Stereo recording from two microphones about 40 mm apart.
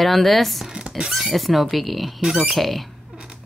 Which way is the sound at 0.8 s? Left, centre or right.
Centre.